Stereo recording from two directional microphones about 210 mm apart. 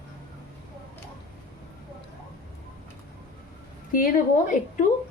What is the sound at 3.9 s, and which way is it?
Speech, 40° left (ahead or behind).